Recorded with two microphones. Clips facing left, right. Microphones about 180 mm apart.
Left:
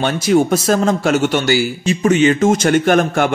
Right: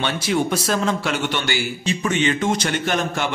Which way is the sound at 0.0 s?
45° left (ahead or behind).